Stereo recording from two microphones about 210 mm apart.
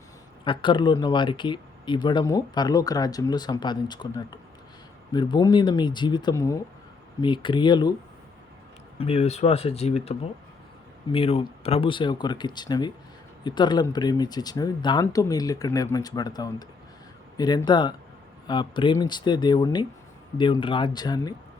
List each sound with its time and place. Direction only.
0.4 s speech: 25° left (ahead or behind)
9.0 s speech: 30° left (ahead or behind)